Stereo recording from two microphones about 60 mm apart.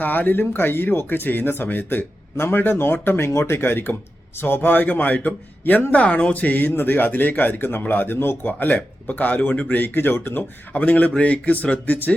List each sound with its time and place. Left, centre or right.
0.0 s speech: left